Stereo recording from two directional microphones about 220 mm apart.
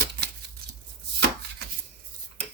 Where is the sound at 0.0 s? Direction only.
50° right (ahead or behind).